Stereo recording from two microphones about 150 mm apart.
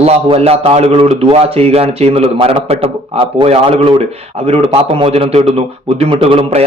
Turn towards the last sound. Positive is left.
turn(degrees=-40)  # may be behind; listen again after turning